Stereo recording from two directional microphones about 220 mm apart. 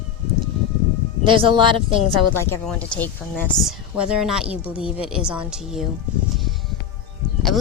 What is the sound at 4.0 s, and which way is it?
Speech, 5° right (ahead or behind).